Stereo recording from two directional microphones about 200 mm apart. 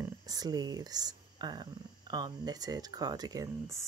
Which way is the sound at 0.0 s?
20° right (ahead or behind).